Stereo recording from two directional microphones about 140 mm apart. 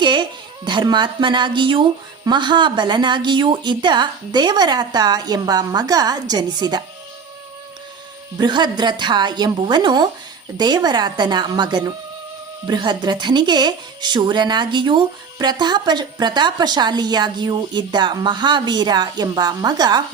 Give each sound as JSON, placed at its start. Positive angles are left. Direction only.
{"t": 0.0, "sound": "speech", "side_deg": -35}
{"t": 8.4, "sound": "speech", "side_deg": -30}